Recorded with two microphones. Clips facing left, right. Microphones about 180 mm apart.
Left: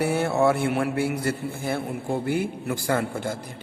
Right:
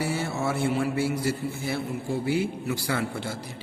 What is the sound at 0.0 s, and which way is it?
A man's voice, 60° left (ahead or behind).